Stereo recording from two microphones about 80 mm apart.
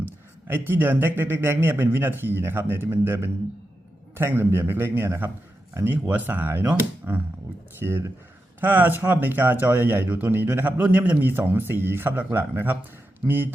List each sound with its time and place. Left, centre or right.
0.0 s speech: right